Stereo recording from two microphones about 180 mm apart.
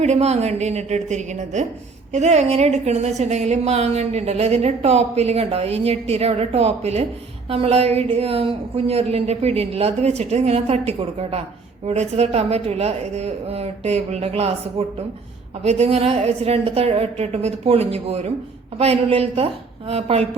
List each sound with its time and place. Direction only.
0.0 s a woman's voice: 35° right (ahead or behind)